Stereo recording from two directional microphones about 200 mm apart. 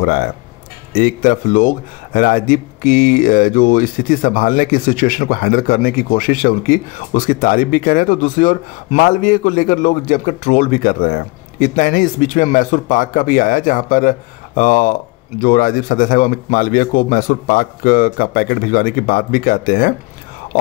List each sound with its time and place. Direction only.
0.9 s speech: 45° left (ahead or behind)